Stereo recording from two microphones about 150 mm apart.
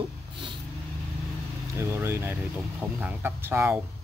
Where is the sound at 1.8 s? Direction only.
15° right (ahead or behind).